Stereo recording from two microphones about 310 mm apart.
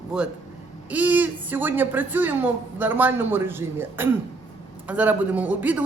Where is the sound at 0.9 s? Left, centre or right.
Centre.